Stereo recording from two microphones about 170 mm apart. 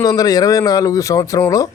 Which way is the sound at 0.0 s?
20° left (ahead or behind).